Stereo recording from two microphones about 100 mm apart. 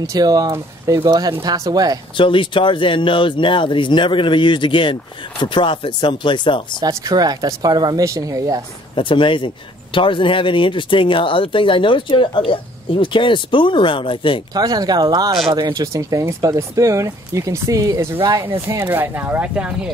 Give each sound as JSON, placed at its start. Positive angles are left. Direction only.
{"t": 0.0, "sound": "speech", "side_deg": -35}
{"t": 0.5, "sound": "speech", "side_deg": -30}
{"t": 1.0, "sound": "speech", "side_deg": -45}
{"t": 2.1, "sound": "speech", "side_deg": 55}
{"t": 6.8, "sound": "speech", "side_deg": -40}
{"t": 8.9, "sound": "speech", "side_deg": 55}
{"t": 14.5, "sound": "speech", "side_deg": -40}